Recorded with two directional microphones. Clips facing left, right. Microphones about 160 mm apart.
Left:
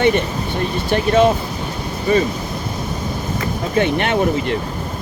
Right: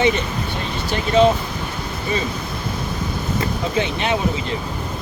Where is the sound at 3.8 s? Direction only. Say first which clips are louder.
Left 5 dB; 55° left (ahead or behind).